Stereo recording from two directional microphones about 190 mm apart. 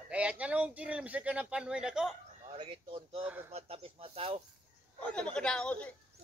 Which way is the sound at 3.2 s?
10° right (ahead or behind).